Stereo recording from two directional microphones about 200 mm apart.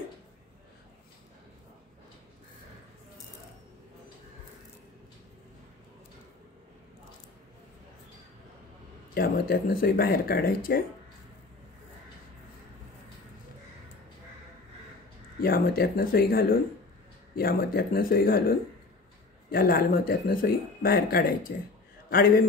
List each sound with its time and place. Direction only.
9.1 s speech: 45° left (ahead or behind)
15.4 s speech: 50° left (ahead or behind)